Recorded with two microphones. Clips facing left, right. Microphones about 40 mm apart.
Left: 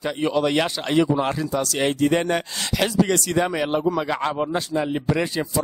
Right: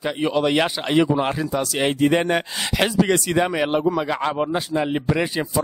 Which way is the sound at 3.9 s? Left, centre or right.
Centre.